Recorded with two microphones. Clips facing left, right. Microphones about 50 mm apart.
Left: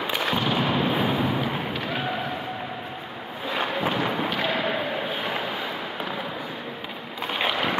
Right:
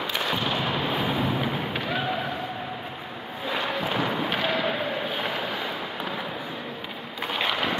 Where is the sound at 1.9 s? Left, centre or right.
Centre.